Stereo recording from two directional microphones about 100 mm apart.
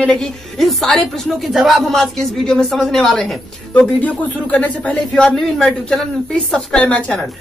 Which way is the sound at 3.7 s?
15° left (ahead or behind).